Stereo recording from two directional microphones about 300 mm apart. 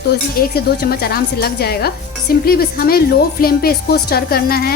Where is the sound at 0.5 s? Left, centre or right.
Left.